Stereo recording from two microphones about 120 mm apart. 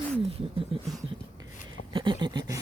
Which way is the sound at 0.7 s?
45° right (ahead or behind).